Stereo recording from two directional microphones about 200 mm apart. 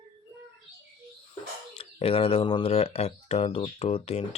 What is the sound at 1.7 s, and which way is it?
Speech, 30° left (ahead or behind).